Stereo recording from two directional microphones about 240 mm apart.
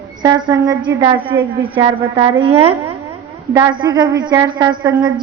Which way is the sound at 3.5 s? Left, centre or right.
Centre.